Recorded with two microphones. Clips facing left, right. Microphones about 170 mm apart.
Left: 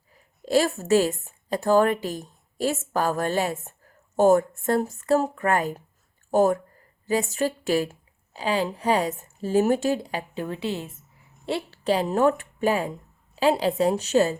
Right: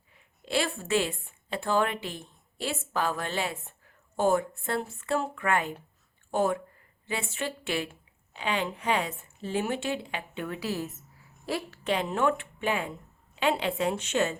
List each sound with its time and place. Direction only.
0.1 s a woman's voice: 40° left (ahead or behind)